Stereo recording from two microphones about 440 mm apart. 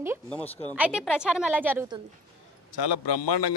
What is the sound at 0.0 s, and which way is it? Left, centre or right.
A woman's voice, centre.